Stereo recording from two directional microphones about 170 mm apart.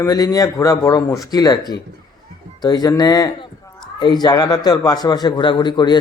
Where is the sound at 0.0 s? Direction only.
20° left (ahead or behind).